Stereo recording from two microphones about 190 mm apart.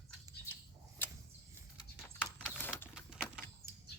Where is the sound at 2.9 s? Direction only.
Centre (ahead or behind).